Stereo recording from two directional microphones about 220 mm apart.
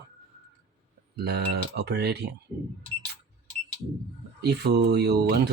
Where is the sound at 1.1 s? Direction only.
50° right (ahead or behind).